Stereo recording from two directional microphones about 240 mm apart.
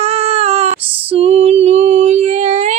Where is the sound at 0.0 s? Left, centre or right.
Right.